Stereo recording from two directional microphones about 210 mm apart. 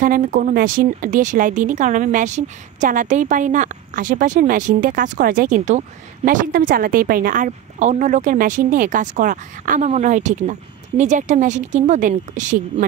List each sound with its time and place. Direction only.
0.0 s speech: 40° right (ahead or behind)